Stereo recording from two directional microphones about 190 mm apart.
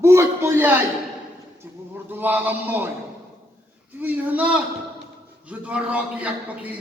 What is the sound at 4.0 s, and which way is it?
A man's voice, 10° right (ahead or behind).